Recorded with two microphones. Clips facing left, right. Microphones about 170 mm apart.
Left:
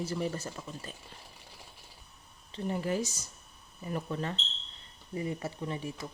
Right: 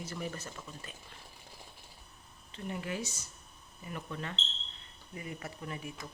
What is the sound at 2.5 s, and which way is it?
Speech, 35° left (ahead or behind).